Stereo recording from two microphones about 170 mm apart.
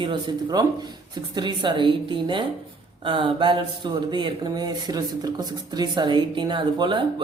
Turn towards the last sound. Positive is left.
turn(degrees=-30)  # may be behind; listen again after turning